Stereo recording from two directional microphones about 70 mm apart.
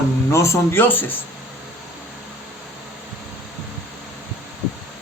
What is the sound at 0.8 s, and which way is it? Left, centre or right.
Speech, left.